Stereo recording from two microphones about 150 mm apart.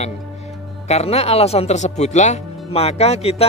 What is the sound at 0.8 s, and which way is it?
Speech, 45° left (ahead or behind).